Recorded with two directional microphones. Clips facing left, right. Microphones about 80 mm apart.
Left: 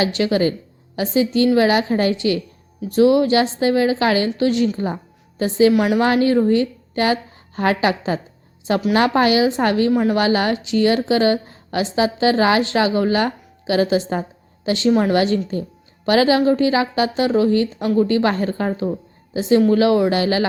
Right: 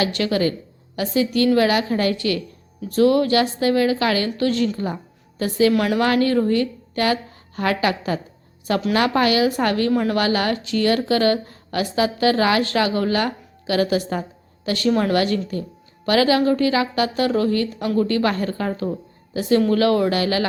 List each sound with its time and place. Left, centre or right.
0.0 s a woman's voice: left
5.7 s a woman's voice: centre
6.2 s a woman's voice: left
9.9 s a woman's voice: centre
10.2 s a woman's voice: left